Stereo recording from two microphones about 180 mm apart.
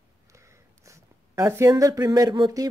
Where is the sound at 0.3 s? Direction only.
15° right (ahead or behind).